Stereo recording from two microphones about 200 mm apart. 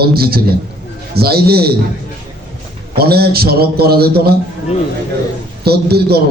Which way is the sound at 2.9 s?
50° right (ahead or behind).